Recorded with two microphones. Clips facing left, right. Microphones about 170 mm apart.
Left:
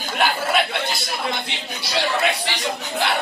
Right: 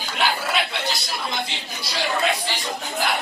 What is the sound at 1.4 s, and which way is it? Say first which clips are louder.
Speech: left 2 dB; 65° left (ahead or behind).